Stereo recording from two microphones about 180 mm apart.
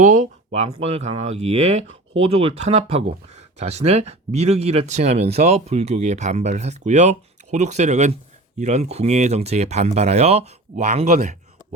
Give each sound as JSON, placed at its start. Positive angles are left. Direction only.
{"t": 0.0, "sound": "speech", "side_deg": -45}